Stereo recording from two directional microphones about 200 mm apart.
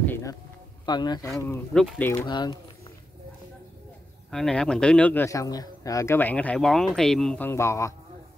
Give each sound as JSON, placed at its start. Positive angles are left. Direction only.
{"t": 0.0, "sound": "a sound", "side_deg": 15}
{"t": 0.8, "sound": "a man's voice", "side_deg": 20}
{"t": 2.2, "sound": "speech", "side_deg": 20}
{"t": 4.3, "sound": "a man's voice", "side_deg": 5}